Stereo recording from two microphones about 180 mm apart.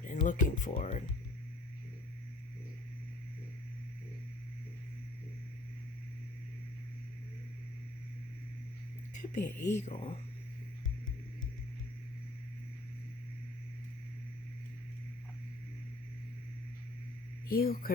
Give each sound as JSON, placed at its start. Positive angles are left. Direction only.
{"t": 0.0, "sound": "speech", "side_deg": 45}
{"t": 9.1, "sound": "speech", "side_deg": 40}
{"t": 17.5, "sound": "speech", "side_deg": 55}